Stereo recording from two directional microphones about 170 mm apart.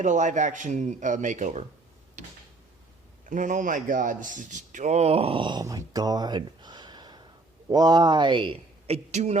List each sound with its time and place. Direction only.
0.0 s speech: 45° right (ahead or behind)
2.2 s a sound: 45° right (ahead or behind)
3.2 s a man's voice: 50° right (ahead or behind)